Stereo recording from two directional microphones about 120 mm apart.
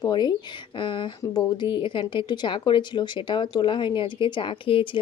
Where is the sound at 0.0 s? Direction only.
35° left (ahead or behind).